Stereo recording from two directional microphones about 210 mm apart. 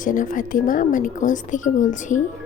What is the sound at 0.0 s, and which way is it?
Speech, 40° left (ahead or behind).